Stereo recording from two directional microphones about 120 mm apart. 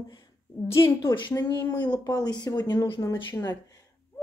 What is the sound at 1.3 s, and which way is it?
Speech, 30° left (ahead or behind).